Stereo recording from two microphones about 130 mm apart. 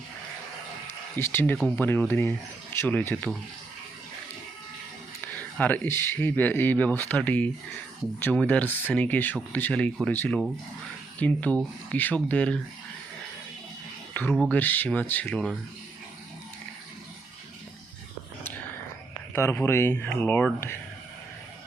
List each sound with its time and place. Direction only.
0.9 s a sound: 20° left (ahead or behind)
1.5 s speech: 10° left (ahead or behind)
5.2 s speech: 10° left (ahead or behind)
14.1 s speech: 15° left (ahead or behind)
19.3 s speech: 15° left (ahead or behind)